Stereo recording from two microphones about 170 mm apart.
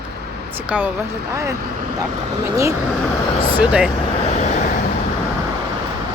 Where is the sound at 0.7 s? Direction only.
10° right (ahead or behind).